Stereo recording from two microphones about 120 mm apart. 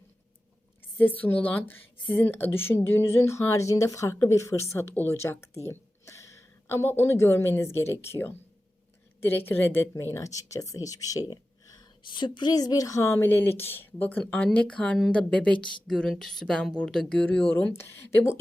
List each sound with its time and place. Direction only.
0.9 s speech: 15° left (ahead or behind)
12.0 s speech: 40° left (ahead or behind); by 18.3 s 20° left (ahead or behind)